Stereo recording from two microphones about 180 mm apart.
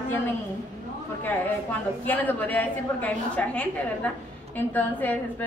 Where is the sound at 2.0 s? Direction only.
10° left (ahead or behind).